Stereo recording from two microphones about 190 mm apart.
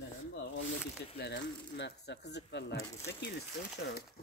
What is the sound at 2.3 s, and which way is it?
Speech, 65° left (ahead or behind).